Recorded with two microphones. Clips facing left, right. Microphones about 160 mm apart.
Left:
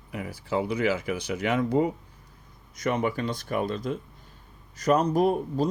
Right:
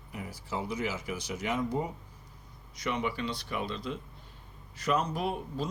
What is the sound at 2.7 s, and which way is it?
Speech, 45° left (ahead or behind).